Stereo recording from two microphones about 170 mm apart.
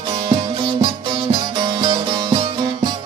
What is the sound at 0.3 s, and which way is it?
Music, 30° right (ahead or behind).